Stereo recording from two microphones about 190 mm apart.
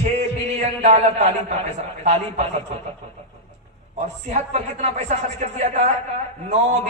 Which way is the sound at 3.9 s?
35° right (ahead or behind).